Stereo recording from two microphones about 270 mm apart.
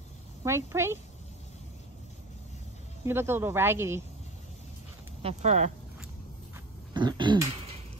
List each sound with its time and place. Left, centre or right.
0.4 s speech: centre
3.1 s speech: centre
5.2 s speech: right
6.9 s throat clearing: centre